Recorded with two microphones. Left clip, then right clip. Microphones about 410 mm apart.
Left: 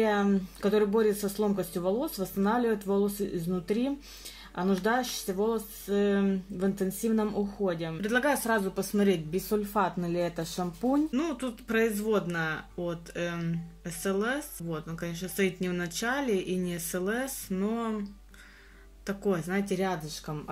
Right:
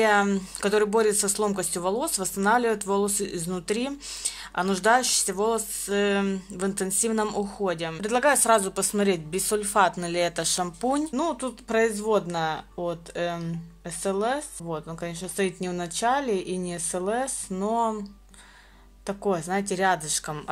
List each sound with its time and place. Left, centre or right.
0.0 s speech: right
8.0 s speech: centre
9.5 s speech: right
11.1 s speech: centre
19.0 s speech: centre
20.2 s speech: right